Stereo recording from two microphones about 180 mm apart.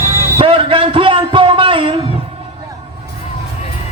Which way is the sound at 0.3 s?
30° right (ahead or behind).